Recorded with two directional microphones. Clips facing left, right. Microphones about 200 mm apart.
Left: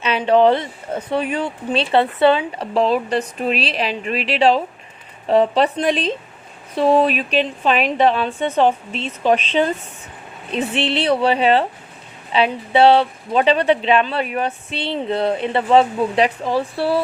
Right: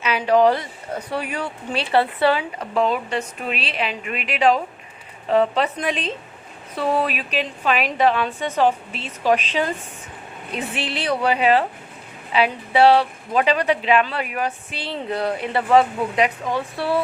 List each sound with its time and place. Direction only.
0.0 s a woman's voice: 25° left (ahead or behind)
2.7 s a woman's voice: 35° left (ahead or behind)
10.5 s a woman's voice: 25° left (ahead or behind)